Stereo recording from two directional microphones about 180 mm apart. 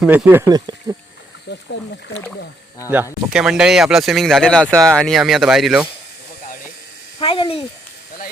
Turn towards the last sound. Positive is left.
turn(degrees=30)  # may be behind; listen again after turning